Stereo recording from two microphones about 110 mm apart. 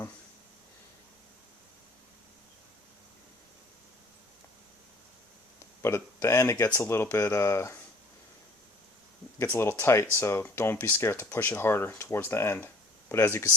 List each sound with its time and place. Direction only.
5.8 s speech: 25° left (ahead or behind)
9.4 s speech: 20° left (ahead or behind)